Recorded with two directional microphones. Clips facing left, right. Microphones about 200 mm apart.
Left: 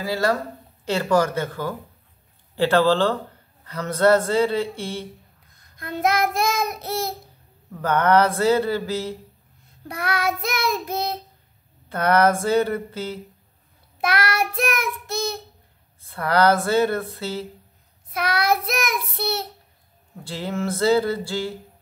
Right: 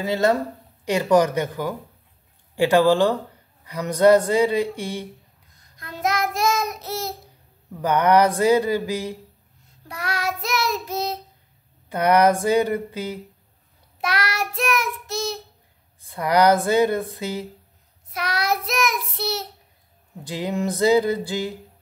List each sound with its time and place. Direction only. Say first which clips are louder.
0.0 s a woman's voice: right 3 dB; 20° right (ahead or behind)
5.8 s child singing: left 3 dB; 55° left (ahead or behind)
7.7 s speech: right 1 dB; 15° right (ahead or behind)
9.8 s child singing: left 3 dB; 55° left (ahead or behind)
11.9 s speech: right 1 dB; 15° right (ahead or behind)
14.0 s child singing: left 3 dB; 55° left (ahead or behind)
16.0 s speech: right 1 dB; 15° right (ahead or behind)
18.1 s child singing: left 3 dB; 55° left (ahead or behind)
20.2 s speech: right 2 dB; 15° right (ahead or behind)